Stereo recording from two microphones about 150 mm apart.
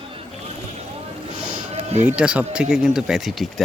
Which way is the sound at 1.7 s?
50° right (ahead or behind).